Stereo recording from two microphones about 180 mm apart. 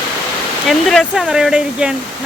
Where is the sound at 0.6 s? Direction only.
Centre (ahead or behind).